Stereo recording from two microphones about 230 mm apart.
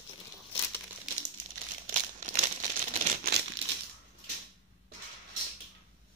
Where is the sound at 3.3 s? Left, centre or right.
Right.